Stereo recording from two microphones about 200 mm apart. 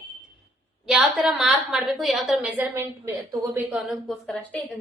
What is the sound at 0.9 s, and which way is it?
A woman's voice, centre (ahead or behind).